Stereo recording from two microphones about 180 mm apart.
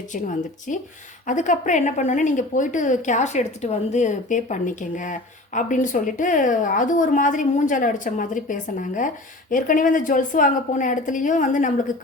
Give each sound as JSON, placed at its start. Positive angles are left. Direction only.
{"t": 1.3, "sound": "a woman's voice", "side_deg": 45}